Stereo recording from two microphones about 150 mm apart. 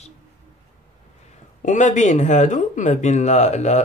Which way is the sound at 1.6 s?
55° left (ahead or behind).